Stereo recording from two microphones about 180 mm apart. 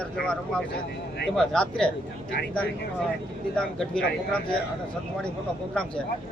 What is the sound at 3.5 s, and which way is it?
Speech, 5° left (ahead or behind).